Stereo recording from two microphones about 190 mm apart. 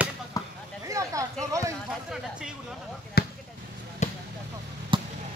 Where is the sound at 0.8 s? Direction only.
15° right (ahead or behind).